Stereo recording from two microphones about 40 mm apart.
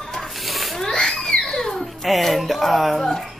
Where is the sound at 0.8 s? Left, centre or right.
Centre.